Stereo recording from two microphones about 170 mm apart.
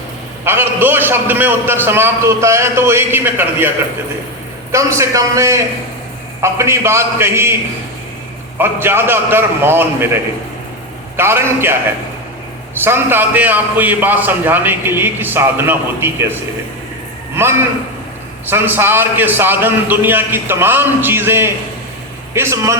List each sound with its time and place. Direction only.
0.4 s a man's voice: 15° right (ahead or behind)
4.7 s a man's voice: 15° right (ahead or behind)
8.5 s a man's voice: 15° right (ahead or behind)
11.2 s a man's voice: 15° right (ahead or behind)
12.8 s a man's voice: 10° right (ahead or behind)